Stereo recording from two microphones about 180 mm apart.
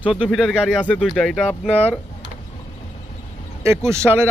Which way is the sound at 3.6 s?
15° right (ahead or behind).